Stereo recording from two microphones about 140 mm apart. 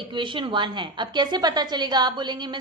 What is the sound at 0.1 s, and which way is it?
A woman's voice, 35° right (ahead or behind).